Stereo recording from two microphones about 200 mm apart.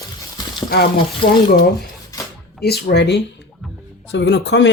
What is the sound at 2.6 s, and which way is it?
Speech, 50° left (ahead or behind).